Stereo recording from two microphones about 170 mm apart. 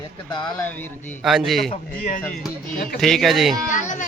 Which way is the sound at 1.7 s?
55° left (ahead or behind).